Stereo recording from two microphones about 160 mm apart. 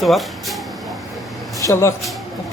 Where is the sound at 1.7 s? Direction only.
15° left (ahead or behind).